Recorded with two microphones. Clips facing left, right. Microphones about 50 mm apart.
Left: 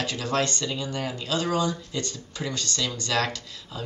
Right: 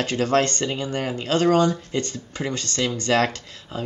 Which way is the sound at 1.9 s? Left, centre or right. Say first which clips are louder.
Right 5 dB; right.